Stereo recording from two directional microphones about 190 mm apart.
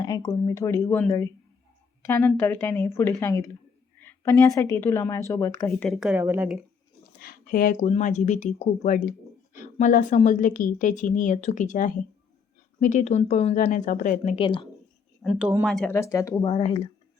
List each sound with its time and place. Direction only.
0.0 s speech: 20° left (ahead or behind)
2.0 s a woman's voice: 10° left (ahead or behind)
5.9 s speech: 5° right (ahead or behind)
7.2 s speech: 50° left (ahead or behind)
14.3 s speech: 30° left (ahead or behind)
15.2 s speech: 5° right (ahead or behind); by 16.9 s 30° left (ahead or behind)